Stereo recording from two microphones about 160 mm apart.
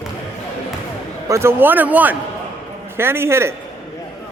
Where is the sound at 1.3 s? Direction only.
15° right (ahead or behind).